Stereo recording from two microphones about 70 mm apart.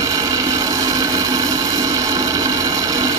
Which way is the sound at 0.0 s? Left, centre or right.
Right.